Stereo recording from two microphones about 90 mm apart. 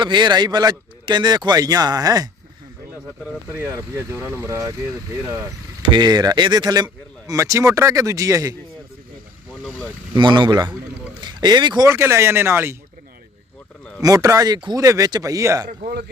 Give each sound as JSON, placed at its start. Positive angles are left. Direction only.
{"t": 0.0, "sound": "speech", "side_deg": -55}
{"t": 3.5, "sound": "speech", "side_deg": -25}
{"t": 5.8, "sound": "speech", "side_deg": -55}
{"t": 9.6, "sound": "vehicle", "side_deg": 15}
{"t": 10.2, "sound": "speech", "side_deg": -60}
{"t": 11.9, "sound": "speech", "side_deg": -30}
{"t": 14.0, "sound": "speech", "side_deg": -40}